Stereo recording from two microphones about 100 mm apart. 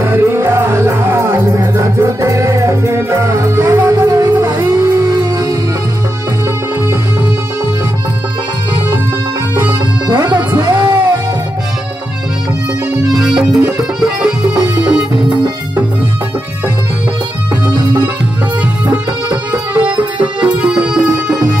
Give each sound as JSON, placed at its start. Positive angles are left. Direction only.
{"t": 0.0, "sound": "music", "side_deg": -20}
{"t": 10.0, "sound": "music", "side_deg": -45}
{"t": 13.1, "sound": "music", "side_deg": -5}
{"t": 19.5, "sound": "music", "side_deg": -15}